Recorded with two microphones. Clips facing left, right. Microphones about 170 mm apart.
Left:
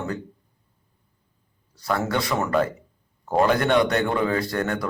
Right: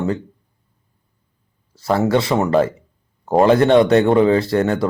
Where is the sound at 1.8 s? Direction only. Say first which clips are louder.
Right 8 dB; 25° right (ahead or behind).